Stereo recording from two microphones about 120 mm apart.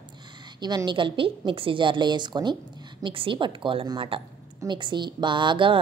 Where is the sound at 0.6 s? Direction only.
35° right (ahead or behind).